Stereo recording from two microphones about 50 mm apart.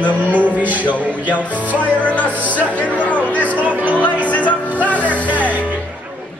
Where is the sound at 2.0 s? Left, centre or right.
Left.